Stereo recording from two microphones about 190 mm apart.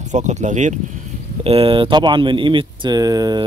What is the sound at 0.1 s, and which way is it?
Speech, 40° right (ahead or behind).